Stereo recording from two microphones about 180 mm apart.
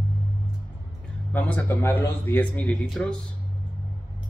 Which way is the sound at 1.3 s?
10° left (ahead or behind).